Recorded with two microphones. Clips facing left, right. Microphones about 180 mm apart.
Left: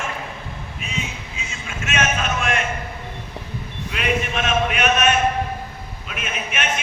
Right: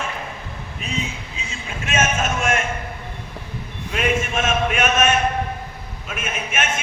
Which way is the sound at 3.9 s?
45° right (ahead or behind).